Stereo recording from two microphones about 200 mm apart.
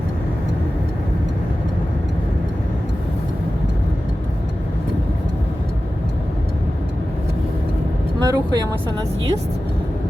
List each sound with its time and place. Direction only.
8.2 s speech: 20° right (ahead or behind)